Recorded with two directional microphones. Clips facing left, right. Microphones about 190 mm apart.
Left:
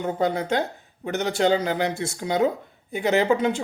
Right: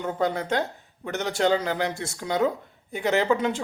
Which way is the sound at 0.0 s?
20° left (ahead or behind).